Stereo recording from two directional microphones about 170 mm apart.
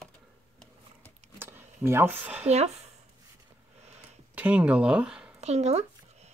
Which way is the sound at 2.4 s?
40° right (ahead or behind).